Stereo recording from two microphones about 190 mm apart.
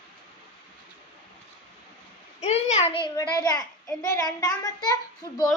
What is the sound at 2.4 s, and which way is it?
A child's voice, 35° left (ahead or behind).